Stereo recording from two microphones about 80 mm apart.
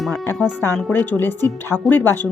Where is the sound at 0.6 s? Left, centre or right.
Left.